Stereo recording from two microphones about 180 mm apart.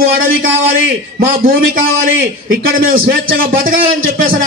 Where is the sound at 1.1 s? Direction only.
50° right (ahead or behind).